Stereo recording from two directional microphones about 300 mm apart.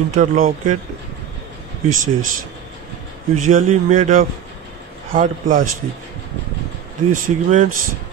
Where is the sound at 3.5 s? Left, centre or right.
Right.